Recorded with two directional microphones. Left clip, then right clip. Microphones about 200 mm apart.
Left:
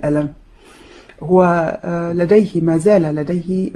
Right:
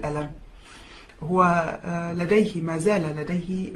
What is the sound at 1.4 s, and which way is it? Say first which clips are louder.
Speech: left 6 dB; 45° left (ahead or behind).